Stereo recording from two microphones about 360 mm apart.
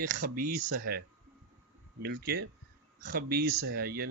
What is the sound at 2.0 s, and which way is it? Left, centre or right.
Speech, right.